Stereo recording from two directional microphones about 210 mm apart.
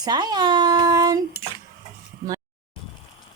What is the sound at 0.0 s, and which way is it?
A child's voice, 20° right (ahead or behind).